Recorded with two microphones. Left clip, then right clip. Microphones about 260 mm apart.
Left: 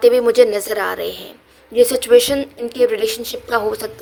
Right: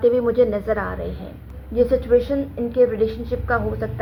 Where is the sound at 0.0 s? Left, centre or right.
Left.